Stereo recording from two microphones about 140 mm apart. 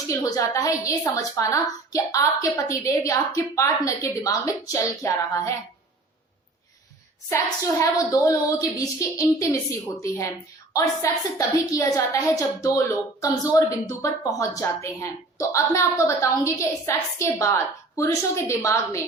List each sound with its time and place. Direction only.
0.1 s a woman's voice: 25° left (ahead or behind)
7.3 s a woman's voice: 20° left (ahead or behind)